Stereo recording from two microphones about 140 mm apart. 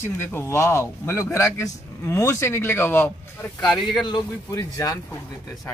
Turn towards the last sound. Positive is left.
turn(degrees=25)  # may be behind; listen again after turning